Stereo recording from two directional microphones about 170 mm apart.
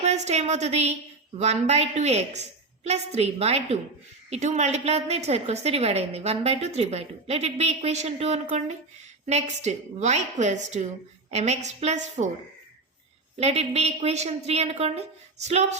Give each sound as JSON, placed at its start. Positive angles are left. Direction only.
{"t": 0.0, "sound": "a woman's voice", "side_deg": -40}
{"t": 13.4, "sound": "a woman's voice", "side_deg": -40}